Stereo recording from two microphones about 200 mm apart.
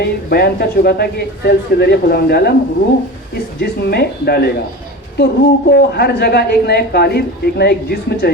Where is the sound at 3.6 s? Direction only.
55° left (ahead or behind).